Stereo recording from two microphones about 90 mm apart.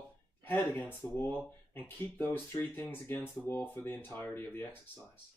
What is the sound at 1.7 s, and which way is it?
Speech, 20° left (ahead or behind).